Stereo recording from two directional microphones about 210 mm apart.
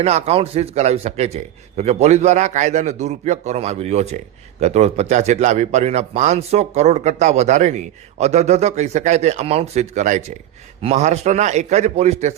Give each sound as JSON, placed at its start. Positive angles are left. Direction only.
{"t": 0.0, "sound": "a man's voice", "side_deg": -30}